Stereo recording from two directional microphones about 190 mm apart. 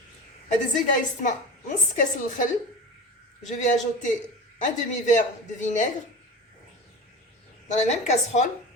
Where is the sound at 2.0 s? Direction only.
40° left (ahead or behind).